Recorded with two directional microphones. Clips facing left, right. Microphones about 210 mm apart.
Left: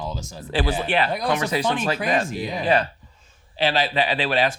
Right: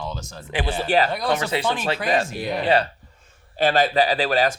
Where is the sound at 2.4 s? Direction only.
65° right (ahead or behind).